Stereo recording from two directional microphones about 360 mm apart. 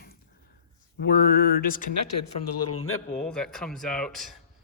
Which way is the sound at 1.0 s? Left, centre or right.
Left.